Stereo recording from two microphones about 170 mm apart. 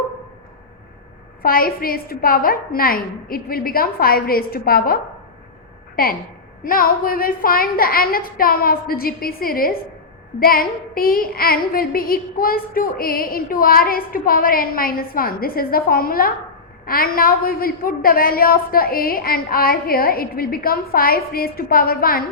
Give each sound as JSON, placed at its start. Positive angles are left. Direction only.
{"t": 1.4, "sound": "child singing", "side_deg": 60}
{"t": 6.6, "sound": "child singing", "side_deg": 55}